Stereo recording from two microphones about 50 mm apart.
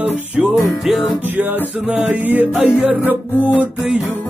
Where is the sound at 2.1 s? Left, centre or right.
Right.